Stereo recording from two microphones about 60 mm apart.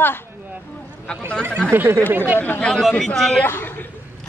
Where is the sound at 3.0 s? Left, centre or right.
Centre.